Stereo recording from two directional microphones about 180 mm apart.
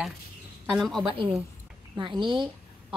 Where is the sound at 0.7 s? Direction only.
Centre (ahead or behind).